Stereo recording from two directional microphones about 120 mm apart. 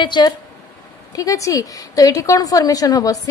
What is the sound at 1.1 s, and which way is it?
A woman's voice, 30° left (ahead or behind).